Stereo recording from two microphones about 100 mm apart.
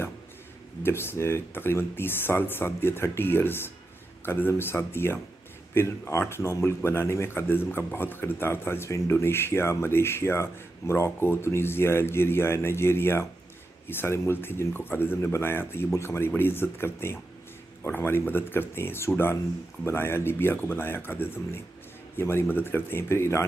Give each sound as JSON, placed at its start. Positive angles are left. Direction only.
{"t": 0.8, "sound": "speech", "side_deg": 25}